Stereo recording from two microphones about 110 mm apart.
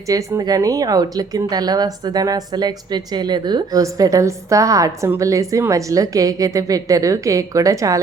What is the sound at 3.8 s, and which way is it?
A woman's voice, 30° right (ahead or behind).